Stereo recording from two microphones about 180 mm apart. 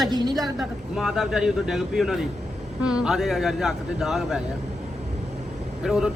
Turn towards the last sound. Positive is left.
turn(degrees=-5)  # may be behind; listen again after turning